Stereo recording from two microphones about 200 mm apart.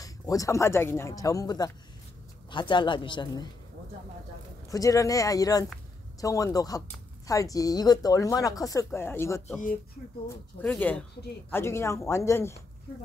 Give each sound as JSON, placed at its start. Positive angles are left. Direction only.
{"t": 0.0, "sound": "speech", "side_deg": 15}
{"t": 2.7, "sound": "speech", "side_deg": 25}
{"t": 4.6, "sound": "speech", "side_deg": 15}